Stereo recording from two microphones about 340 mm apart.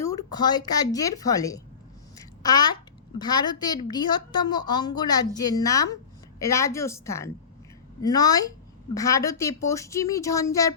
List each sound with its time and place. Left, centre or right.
0.0 s a woman's voice: centre